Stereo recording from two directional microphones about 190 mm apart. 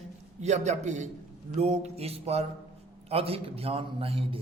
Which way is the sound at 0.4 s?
35° right (ahead or behind).